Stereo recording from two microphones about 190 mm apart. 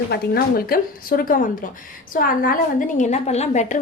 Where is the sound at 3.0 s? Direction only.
35° left (ahead or behind).